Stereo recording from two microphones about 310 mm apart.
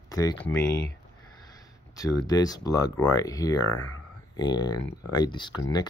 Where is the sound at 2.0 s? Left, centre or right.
Centre.